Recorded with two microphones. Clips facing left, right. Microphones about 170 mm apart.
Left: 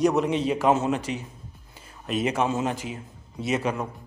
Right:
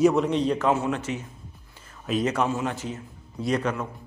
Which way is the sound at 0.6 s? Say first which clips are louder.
Left 2 dB; 20° left (ahead or behind).